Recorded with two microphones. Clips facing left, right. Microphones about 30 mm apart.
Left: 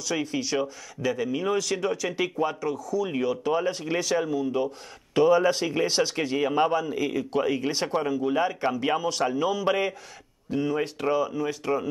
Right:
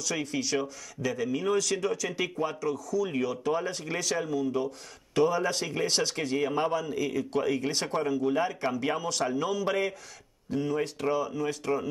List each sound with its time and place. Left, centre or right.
0.0 s speech: centre